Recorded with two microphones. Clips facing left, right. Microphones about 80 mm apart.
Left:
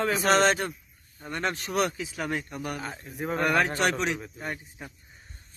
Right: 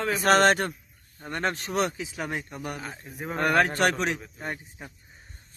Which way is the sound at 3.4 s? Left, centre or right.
Right.